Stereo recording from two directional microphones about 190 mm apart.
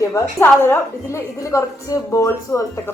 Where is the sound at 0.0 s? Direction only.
15° left (ahead or behind).